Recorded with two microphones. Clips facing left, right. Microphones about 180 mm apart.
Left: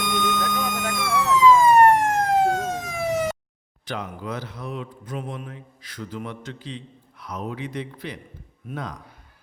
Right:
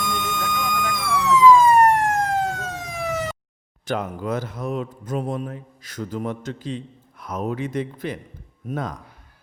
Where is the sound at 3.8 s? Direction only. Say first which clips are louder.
Right 6 dB; 45° right (ahead or behind).